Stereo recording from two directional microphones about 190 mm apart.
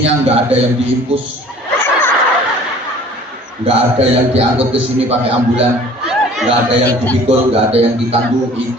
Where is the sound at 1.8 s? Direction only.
10° left (ahead or behind).